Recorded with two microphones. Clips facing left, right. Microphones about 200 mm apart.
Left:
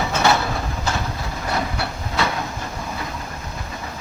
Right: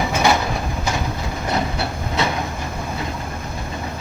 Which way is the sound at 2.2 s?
20° right (ahead or behind).